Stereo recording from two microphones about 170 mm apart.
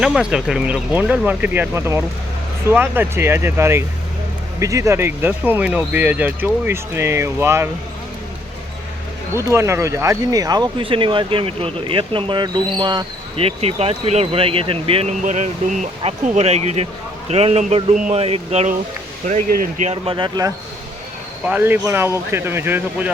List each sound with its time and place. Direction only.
0.0 s speech: 5° right (ahead or behind)
9.3 s speech: 15° right (ahead or behind); by 15.1 s 35° right (ahead or behind)
15.2 s speech: 45° right (ahead or behind)
19.8 s speech: 35° right (ahead or behind)
21.4 s speech: 10° right (ahead or behind)